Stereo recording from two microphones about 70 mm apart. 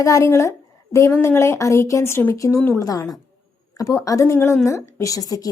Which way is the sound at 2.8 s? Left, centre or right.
Left.